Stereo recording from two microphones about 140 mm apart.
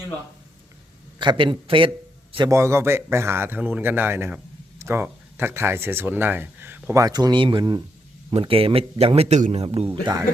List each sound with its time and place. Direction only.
1.2 s a man's voice: 35° right (ahead or behind)
2.5 s a man's voice: 20° right (ahead or behind); by 10.0 s 45° right (ahead or behind)